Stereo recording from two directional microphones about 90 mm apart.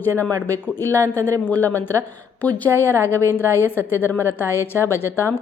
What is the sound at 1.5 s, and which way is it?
A woman's voice, 20° left (ahead or behind).